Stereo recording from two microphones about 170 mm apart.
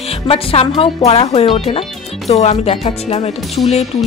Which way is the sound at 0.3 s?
35° left (ahead or behind).